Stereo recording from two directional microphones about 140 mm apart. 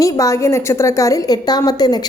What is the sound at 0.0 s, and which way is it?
A woman's voice, 25° left (ahead or behind).